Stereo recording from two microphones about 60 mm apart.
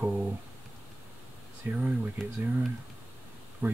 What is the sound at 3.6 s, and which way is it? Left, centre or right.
Speech, right.